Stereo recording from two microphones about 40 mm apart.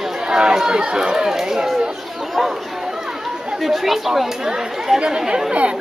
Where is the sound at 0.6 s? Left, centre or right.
Centre.